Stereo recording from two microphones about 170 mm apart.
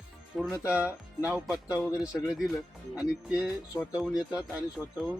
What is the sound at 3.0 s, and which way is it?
Speech, 5° right (ahead or behind).